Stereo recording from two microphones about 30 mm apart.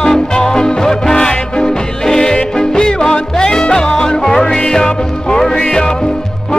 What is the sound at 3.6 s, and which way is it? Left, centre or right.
Music, left.